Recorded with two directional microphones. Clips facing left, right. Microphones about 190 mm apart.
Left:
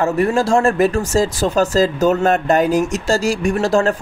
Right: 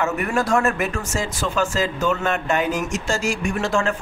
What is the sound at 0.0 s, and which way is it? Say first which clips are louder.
Speech: left 6 dB; 30° left (ahead or behind).